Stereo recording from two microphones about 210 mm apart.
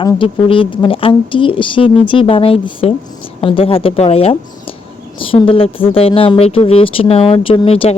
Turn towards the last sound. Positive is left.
turn(degrees=25)  # may be behind; listen again after turning